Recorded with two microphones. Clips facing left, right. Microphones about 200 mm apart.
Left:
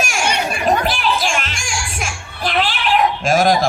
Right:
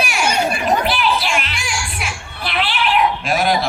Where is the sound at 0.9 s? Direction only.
45° left (ahead or behind).